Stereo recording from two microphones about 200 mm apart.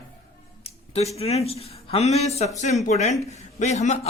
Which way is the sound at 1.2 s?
30° left (ahead or behind).